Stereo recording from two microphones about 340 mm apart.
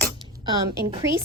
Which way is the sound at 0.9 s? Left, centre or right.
Centre.